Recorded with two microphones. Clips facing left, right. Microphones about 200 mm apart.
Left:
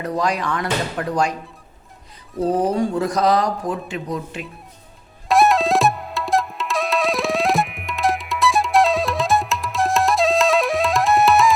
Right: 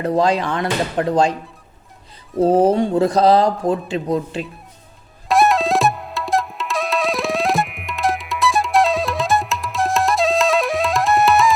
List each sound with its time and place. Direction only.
0.0 s speech: 25° right (ahead or behind)
2.5 s speech: 25° right (ahead or behind)
5.3 s tabla: centre (ahead or behind)